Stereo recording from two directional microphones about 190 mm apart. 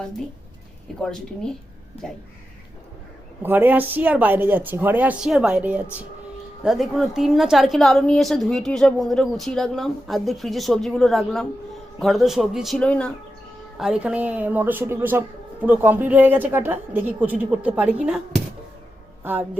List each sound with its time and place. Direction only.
1.0 s a woman's voice: 5° left (ahead or behind)
3.4 s a woman's voice: 10° right (ahead or behind)
19.2 s speech: 10° right (ahead or behind)